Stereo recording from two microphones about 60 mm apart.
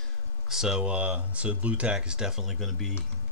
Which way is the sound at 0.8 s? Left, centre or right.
Right.